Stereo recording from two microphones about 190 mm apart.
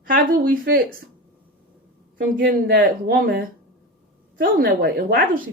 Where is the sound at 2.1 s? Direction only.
55° right (ahead or behind).